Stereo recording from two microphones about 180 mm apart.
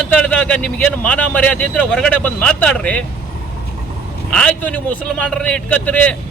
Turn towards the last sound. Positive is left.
turn(degrees=5)  # may be behind; listen again after turning